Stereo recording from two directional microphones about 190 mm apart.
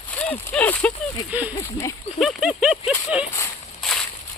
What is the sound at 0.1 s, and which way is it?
Speech, 10° left (ahead or behind).